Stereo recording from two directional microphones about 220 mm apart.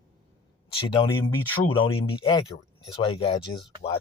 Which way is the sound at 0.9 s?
20° left (ahead or behind).